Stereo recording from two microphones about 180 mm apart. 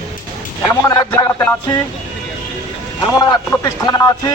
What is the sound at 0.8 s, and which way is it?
Music, 15° left (ahead or behind).